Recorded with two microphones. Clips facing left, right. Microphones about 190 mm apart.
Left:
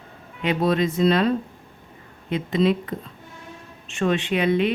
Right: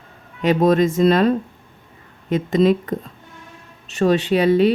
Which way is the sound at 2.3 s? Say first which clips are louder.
Right 5 dB; 45° right (ahead or behind).